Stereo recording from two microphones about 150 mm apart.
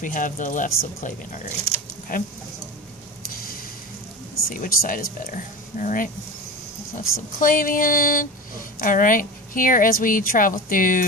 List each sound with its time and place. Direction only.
0.0 s a woman's voice: 60° left (ahead or behind)
4.5 s a woman's voice: 70° left (ahead or behind)
7.0 s a woman's voice: 70° left (ahead or behind)